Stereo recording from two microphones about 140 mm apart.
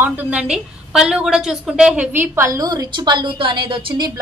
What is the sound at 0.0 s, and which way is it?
A woman's voice, 15° right (ahead or behind).